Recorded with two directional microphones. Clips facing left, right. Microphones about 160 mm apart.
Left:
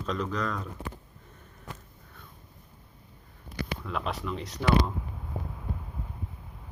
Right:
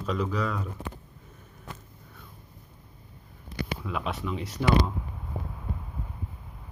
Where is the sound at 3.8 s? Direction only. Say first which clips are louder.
Even; 5° right (ahead or behind).